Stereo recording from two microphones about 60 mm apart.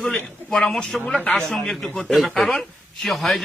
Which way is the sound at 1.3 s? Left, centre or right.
Centre.